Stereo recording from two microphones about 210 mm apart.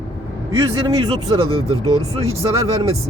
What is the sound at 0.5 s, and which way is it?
Speech, 15° right (ahead or behind).